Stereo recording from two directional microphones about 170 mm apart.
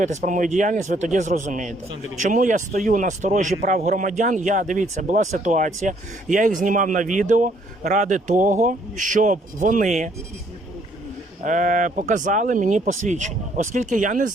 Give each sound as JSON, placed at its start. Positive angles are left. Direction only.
{"t": 0.0, "sound": "speech", "side_deg": -45}
{"t": 11.4, "sound": "speech", "side_deg": -50}